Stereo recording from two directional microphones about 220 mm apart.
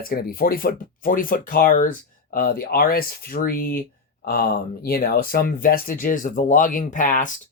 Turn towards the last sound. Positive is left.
turn(degrees=35)  # may be behind; listen again after turning